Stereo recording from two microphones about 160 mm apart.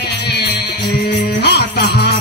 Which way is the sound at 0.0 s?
90° left.